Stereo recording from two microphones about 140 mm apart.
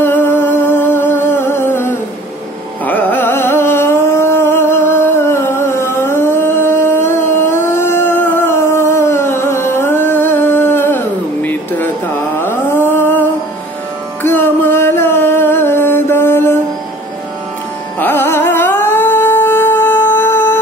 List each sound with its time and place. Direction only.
0.0 s music: 15° left (ahead or behind)
11.4 s a sound: 10° left (ahead or behind)
12.4 s carnatic music: 15° left (ahead or behind)
14.2 s music: 15° left (ahead or behind)
17.9 s music: 15° left (ahead or behind)